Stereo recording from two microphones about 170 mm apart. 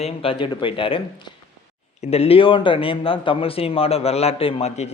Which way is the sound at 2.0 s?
35° left (ahead or behind).